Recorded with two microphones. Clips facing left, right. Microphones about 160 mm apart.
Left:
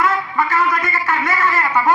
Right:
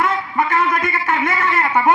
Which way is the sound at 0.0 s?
25° right (ahead or behind).